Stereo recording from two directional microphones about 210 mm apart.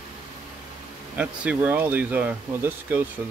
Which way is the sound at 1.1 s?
5° right (ahead or behind).